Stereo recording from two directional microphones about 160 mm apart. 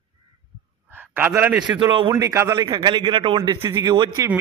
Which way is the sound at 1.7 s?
30° right (ahead or behind).